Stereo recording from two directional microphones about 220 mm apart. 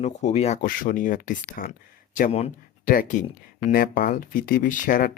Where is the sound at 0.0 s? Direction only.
30° left (ahead or behind).